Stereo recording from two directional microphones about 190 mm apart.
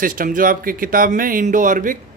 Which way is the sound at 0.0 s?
45° right (ahead or behind).